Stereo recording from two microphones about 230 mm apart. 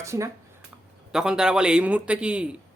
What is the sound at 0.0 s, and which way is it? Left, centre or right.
A man's voice, centre.